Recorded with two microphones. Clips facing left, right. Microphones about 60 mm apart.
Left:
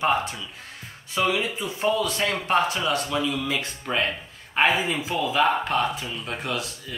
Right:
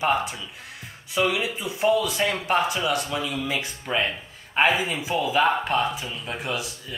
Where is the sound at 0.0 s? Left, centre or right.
Centre.